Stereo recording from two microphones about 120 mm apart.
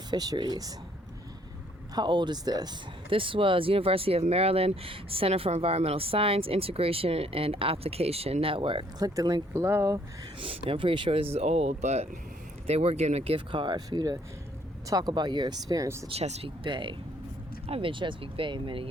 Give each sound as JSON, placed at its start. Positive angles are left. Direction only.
{"t": 0.1, "sound": "speech", "side_deg": -35}
{"t": 2.0, "sound": "speech", "side_deg": -40}
{"t": 3.1, "sound": "speech", "side_deg": -45}
{"t": 9.0, "sound": "speech", "side_deg": -30}
{"t": 10.4, "sound": "speech", "side_deg": -50}
{"t": 12.6, "sound": "speech", "side_deg": -60}
{"t": 16.0, "sound": "speech", "side_deg": -55}
{"t": 16.6, "sound": "speech", "side_deg": -40}